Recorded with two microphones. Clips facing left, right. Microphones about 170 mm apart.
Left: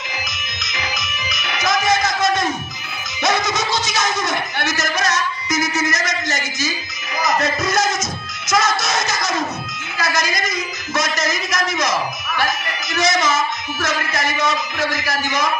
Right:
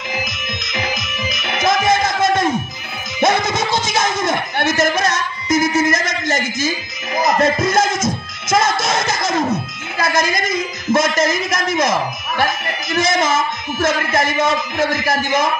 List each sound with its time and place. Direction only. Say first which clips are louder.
0.1 s music: right 6 dB; 55° right (ahead or behind)
14.4 s a man's voice: right 4 dB; 50° right (ahead or behind)